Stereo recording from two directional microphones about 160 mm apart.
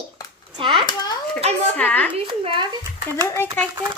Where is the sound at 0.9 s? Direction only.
25° left (ahead or behind).